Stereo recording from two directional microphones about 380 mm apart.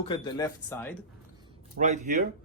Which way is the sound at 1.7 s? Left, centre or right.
Centre.